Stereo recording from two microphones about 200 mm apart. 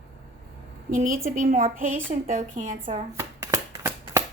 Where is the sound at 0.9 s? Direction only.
45° right (ahead or behind).